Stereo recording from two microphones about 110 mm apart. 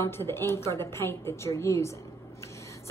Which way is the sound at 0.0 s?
20° left (ahead or behind).